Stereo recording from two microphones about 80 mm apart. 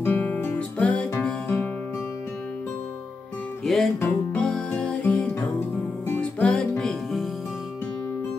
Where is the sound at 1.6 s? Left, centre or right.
Left.